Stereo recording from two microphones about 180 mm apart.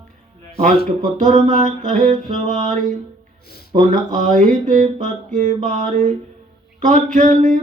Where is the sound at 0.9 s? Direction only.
45° right (ahead or behind).